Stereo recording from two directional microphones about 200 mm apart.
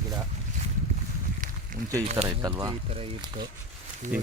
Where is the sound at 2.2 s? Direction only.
20° right (ahead or behind).